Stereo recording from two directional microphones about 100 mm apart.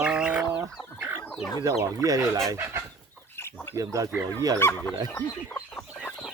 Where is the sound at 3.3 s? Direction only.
25° left (ahead or behind).